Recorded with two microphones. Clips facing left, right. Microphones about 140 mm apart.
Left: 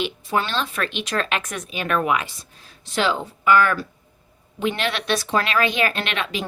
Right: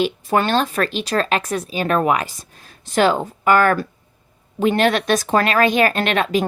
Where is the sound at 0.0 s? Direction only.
50° right (ahead or behind).